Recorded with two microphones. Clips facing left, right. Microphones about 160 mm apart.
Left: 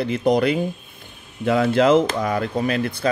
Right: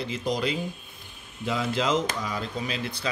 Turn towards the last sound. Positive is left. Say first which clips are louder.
# left 10 dB
turn(degrees=50)  # may be behind; listen again after turning